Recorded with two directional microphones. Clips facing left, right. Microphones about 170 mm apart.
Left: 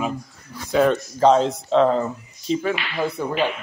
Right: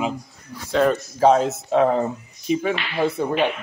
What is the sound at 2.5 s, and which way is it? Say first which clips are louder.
Speech: right 1 dB; 20° right (ahead or behind).